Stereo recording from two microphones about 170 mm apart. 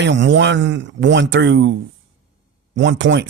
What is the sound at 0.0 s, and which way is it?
Speech, 90° right.